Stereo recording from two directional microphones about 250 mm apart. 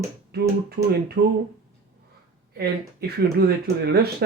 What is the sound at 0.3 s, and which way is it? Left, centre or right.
Speech, right.